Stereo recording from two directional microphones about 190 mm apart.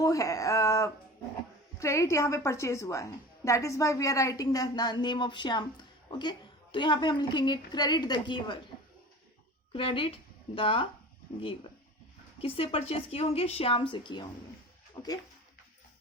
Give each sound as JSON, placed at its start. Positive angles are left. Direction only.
{"t": 0.0, "sound": "a woman's voice", "side_deg": 15}
{"t": 9.7, "sound": "a woman's voice", "side_deg": 30}
{"t": 12.4, "sound": "a woman's voice", "side_deg": 30}